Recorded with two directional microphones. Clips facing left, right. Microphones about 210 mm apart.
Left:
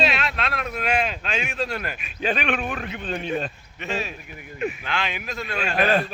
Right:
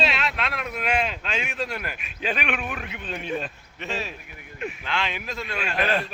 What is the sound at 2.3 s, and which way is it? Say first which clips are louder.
Speech: left 3 dB; 35° left (ahead or behind).